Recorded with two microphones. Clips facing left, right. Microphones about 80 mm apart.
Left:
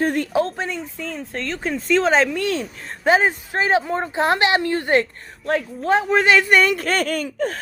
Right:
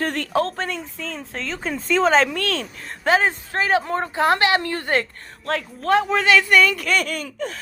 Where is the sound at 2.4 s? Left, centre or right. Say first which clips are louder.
Left 3 dB; centre.